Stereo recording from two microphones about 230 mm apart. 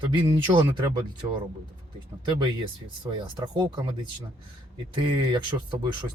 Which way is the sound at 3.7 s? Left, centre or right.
Centre.